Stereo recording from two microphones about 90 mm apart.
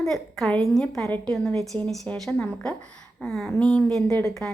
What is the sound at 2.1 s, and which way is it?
Speech, 15° left (ahead or behind).